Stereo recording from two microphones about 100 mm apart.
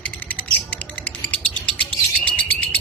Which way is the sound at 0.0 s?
15° left (ahead or behind).